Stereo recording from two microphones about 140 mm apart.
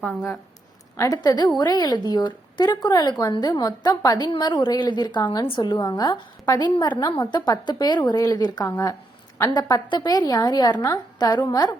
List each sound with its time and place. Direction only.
0.0 s speech: centre (ahead or behind)
0.9 s a woman's voice: 25° left (ahead or behind)